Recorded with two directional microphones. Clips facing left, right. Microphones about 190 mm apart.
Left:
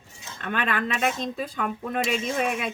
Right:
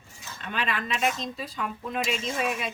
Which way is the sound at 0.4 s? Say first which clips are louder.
Left 4 dB; 55° left (ahead or behind).